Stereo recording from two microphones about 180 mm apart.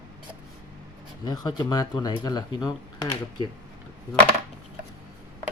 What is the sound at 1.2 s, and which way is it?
Speech, 20° left (ahead or behind).